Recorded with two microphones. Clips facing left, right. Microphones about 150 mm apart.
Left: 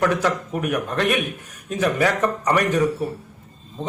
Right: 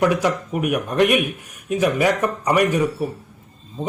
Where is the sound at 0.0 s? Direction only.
15° right (ahead or behind).